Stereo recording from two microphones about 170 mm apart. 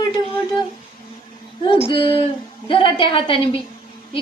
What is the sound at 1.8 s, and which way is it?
A woman's voice, 30° left (ahead or behind).